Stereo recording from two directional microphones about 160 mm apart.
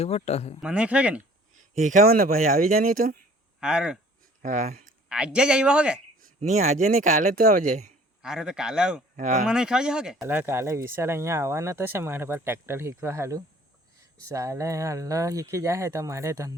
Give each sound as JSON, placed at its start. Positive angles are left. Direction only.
{"t": 0.0, "sound": "speech", "side_deg": 40}
{"t": 0.6, "sound": "speech", "side_deg": -5}
{"t": 1.7, "sound": "speech", "side_deg": -50}
{"t": 2.0, "sound": "speech", "side_deg": -65}
{"t": 3.6, "sound": "a man's voice", "side_deg": -5}
{"t": 4.4, "sound": "speech", "side_deg": -50}
{"t": 5.0, "sound": "speech", "side_deg": -5}
{"t": 6.4, "sound": "speech", "side_deg": -45}
{"t": 8.2, "sound": "a man's voice", "side_deg": -5}
{"t": 9.1, "sound": "speech", "side_deg": -50}
{"t": 9.5, "sound": "a man's voice", "side_deg": -5}